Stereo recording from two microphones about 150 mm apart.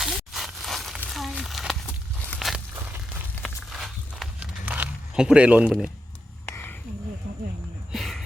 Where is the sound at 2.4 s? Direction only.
Centre (ahead or behind).